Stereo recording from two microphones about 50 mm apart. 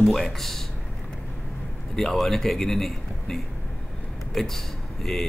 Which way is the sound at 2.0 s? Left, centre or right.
Centre.